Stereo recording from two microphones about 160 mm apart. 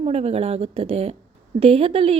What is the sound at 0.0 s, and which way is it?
A woman's voice, 40° right (ahead or behind).